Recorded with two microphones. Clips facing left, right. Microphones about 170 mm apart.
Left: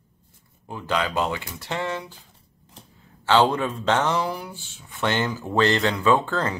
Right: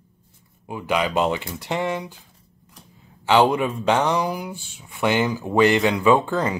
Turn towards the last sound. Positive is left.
turn(degrees=-15)  # may be behind; listen again after turning